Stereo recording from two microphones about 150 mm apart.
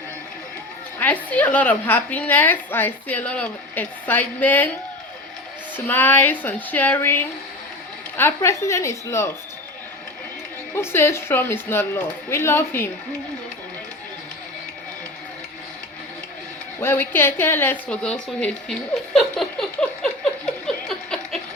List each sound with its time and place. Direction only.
0.9 s a woman's voice: 10° left (ahead or behind)
5.7 s a woman's voice: 15° left (ahead or behind)
10.8 s a woman's voice: 15° left (ahead or behind)
16.8 s a woman's voice: 15° left (ahead or behind)
19.1 s a sound: 5° left (ahead or behind)